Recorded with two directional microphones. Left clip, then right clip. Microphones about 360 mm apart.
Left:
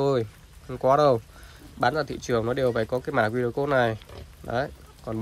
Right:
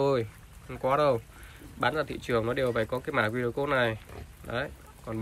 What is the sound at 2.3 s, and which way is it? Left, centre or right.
Speech, centre.